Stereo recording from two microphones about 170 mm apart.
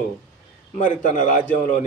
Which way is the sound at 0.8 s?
50° left (ahead or behind).